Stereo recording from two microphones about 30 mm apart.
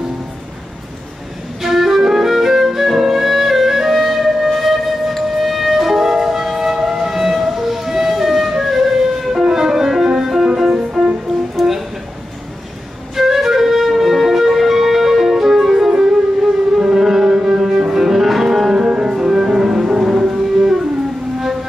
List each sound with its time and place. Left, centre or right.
1.6 s flute: centre
4.5 s wind instrument: centre
5.2 s music: centre
10.8 s music: right
13.1 s flute: centre
15.9 s music: centre
18.8 s music: right